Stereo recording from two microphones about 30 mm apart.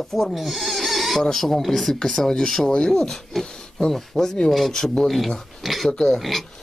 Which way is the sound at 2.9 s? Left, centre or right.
Centre.